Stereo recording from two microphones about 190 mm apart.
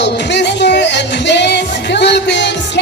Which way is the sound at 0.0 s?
65° left (ahead or behind).